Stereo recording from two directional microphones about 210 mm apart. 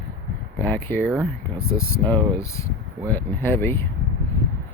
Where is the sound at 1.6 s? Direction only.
80° left.